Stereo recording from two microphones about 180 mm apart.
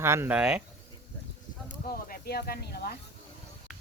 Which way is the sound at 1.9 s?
55° left (ahead or behind).